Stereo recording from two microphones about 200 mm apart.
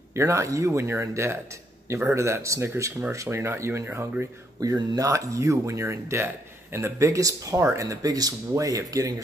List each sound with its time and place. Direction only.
0.1 s speech: 15° right (ahead or behind)